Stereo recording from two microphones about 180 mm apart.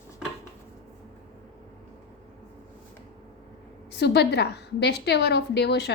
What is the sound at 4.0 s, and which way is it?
A woman's voice, 70° left (ahead or behind).